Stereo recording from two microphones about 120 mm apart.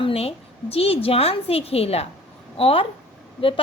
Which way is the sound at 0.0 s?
55° left (ahead or behind).